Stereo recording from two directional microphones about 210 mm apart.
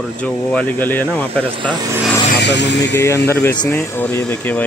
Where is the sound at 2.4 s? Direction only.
55° left (ahead or behind).